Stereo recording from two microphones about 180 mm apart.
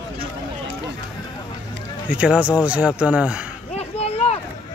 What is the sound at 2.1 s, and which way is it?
A man's voice, 5° right (ahead or behind).